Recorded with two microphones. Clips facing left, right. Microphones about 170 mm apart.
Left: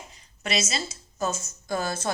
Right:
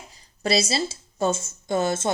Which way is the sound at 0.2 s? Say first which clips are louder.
Right 6 dB; 35° right (ahead or behind).